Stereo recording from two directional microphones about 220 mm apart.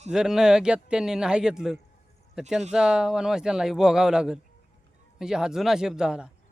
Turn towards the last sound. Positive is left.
turn(degrees=-5)  # may be behind; listen again after turning